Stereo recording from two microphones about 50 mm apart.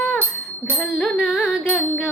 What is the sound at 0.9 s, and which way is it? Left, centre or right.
Music, centre.